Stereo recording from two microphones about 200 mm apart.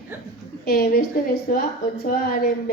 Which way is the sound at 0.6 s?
50° left (ahead or behind).